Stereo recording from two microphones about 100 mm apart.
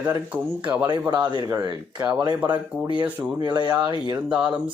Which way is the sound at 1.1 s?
45° right (ahead or behind).